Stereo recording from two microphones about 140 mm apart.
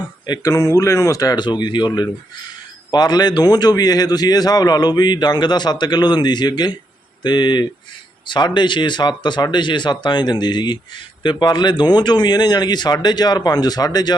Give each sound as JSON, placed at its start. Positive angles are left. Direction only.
{"t": 0.3, "sound": "speech", "side_deg": 25}